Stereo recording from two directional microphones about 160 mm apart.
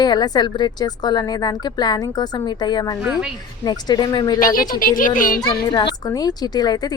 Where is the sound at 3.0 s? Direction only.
5° right (ahead or behind).